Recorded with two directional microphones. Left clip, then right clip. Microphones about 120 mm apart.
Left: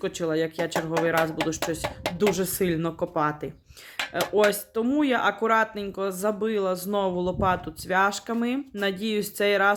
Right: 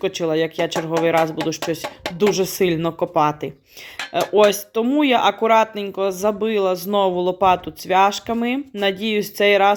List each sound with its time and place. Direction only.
0.0 s speech: 10° right (ahead or behind)
4.2 s speech: 5° right (ahead or behind)
4.7 s speech: 15° right (ahead or behind)